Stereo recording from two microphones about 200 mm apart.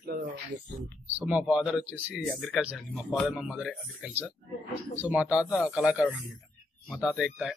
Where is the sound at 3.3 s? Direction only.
5° right (ahead or behind).